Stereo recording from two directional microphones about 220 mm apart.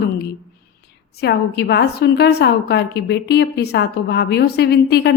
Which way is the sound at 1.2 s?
50° left (ahead or behind).